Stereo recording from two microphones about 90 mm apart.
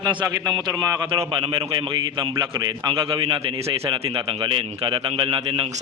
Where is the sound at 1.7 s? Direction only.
60° right (ahead or behind).